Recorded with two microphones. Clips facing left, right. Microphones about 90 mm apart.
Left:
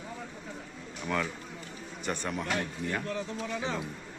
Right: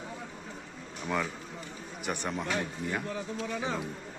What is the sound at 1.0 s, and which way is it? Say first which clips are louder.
Speech: even; 10° right (ahead or behind).